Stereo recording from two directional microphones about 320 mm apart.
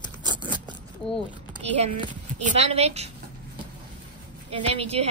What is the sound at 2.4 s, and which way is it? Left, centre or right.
Speech, centre.